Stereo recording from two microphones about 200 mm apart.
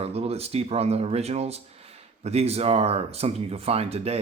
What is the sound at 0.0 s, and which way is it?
Speech, 30° right (ahead or behind).